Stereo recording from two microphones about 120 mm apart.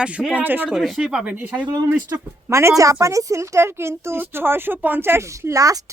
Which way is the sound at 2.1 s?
20° right (ahead or behind).